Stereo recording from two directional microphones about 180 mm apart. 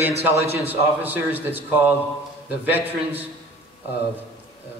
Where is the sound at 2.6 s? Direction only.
10° right (ahead or behind).